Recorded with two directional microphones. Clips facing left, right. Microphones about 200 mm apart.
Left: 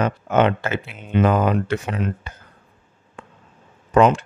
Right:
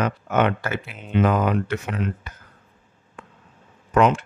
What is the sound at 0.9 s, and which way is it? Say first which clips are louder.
Speech: even; centre (ahead or behind).